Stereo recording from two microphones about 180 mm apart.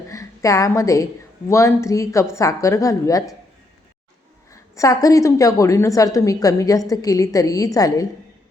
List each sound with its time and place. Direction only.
0.1 s a woman's voice: 20° left (ahead or behind)
4.7 s a woman's voice: 20° left (ahead or behind)